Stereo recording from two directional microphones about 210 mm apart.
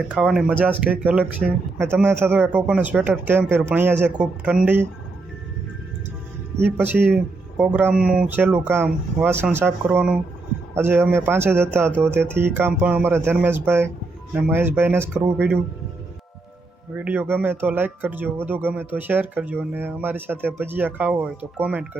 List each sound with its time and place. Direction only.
0.1 s speech: 5° right (ahead or behind)
6.7 s speech: 10° right (ahead or behind)
17.0 s speech: 10° right (ahead or behind)